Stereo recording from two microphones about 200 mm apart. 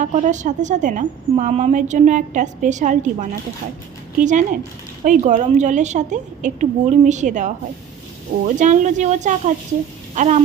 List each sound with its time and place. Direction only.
0.0 s a woman's voice: 40° right (ahead or behind)
8.5 s a woman's voice: 40° right (ahead or behind)